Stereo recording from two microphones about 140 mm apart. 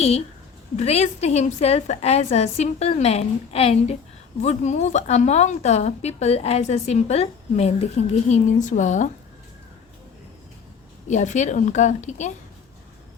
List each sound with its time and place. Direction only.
0.8 s a woman's voice: 50° left (ahead or behind)
4.4 s a woman's voice: 55° left (ahead or behind)
11.1 s a woman's voice: 55° left (ahead or behind)